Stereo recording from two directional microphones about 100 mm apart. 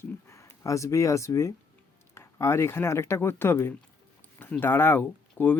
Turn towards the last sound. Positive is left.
turn(degrees=20)  # may be behind; listen again after turning